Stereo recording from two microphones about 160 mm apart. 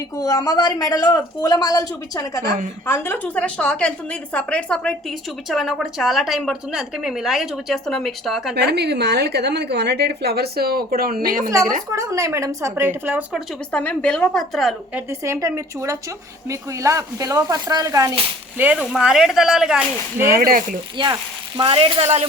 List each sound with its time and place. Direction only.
0.2 s a woman's voice: 20° left (ahead or behind); by 8.5 s centre (ahead or behind)
8.5 s a woman's voice: 90° right; by 11.5 s 60° right (ahead or behind)
11.9 s speech: 20° right (ahead or behind)
13.3 s a woman's voice: 5° left (ahead or behind)
14.9 s speech: 20° right (ahead or behind)
18.5 s a woman's voice: 10° right (ahead or behind)
20.3 s speech: 65° right (ahead or behind)
21.0 s speech: 30° right (ahead or behind)